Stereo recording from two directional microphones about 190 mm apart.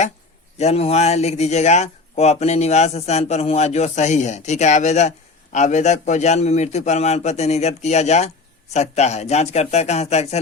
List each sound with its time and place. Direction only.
0.6 s speech: 35° left (ahead or behind)